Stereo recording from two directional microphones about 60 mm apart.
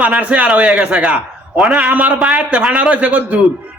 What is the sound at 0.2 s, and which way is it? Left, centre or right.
A man's voice, right.